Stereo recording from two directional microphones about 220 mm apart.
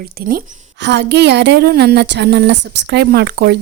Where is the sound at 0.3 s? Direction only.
45° right (ahead or behind).